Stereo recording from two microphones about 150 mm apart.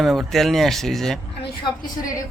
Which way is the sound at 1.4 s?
75° left (ahead or behind).